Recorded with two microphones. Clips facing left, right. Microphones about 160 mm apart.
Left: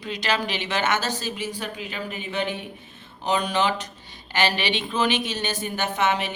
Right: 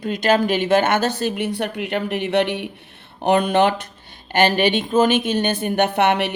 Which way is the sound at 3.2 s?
55° right (ahead or behind).